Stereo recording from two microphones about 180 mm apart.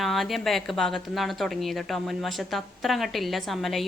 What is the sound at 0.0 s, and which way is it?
Speech, centre (ahead or behind).